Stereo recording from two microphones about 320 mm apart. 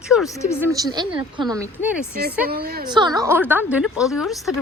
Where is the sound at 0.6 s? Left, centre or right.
Centre.